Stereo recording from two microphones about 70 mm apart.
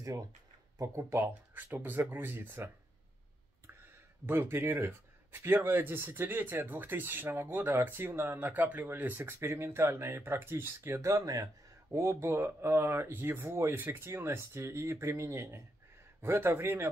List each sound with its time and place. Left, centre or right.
0.9 s speech: right
4.3 s speech: right
11.1 s speech: right